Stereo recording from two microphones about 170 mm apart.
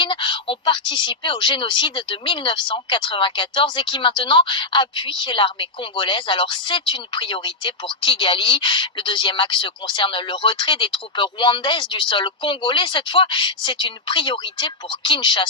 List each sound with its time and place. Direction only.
0.0 s speech: 30° left (ahead or behind)